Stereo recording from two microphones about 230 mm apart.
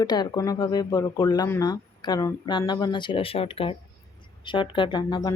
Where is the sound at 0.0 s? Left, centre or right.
Centre.